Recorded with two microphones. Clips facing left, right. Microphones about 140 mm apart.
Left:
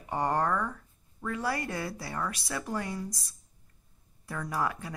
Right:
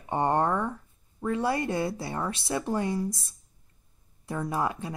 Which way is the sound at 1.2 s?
25° right (ahead or behind).